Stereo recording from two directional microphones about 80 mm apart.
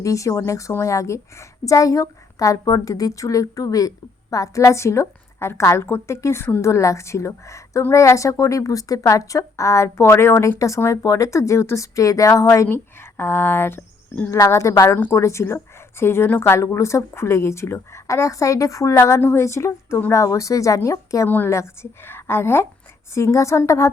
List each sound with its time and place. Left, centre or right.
0.0 s a woman's voice: left
11.0 s a woman's voice: left
12.6 s speech: left
14.3 s a woman's voice: left
21.2 s a woman's voice: left